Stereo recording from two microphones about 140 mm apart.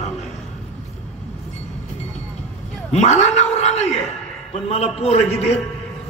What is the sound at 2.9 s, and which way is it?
Speech, 50° left (ahead or behind).